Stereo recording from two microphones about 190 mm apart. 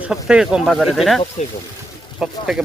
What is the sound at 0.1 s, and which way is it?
Speech, 5° right (ahead or behind).